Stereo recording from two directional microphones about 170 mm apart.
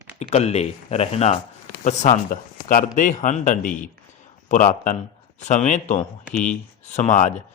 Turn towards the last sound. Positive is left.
turn(degrees=45)  # may be behind; listen again after turning